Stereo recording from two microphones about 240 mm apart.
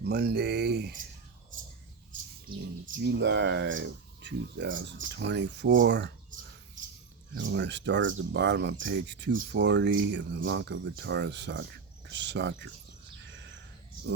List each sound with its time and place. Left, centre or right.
0.0 s speech: right
2.8 s speech: right
7.3 s speech: right